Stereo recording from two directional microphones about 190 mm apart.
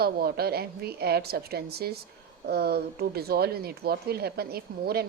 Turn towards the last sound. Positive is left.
turn(degrees=-55)  # may be behind; listen again after turning